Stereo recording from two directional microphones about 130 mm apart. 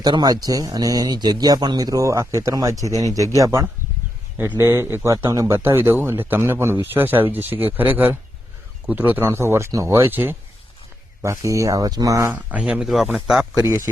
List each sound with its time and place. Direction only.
0.0 s speech: 30° right (ahead or behind)
12.3 s speech: 10° right (ahead or behind)
13.6 s speech: 25° right (ahead or behind)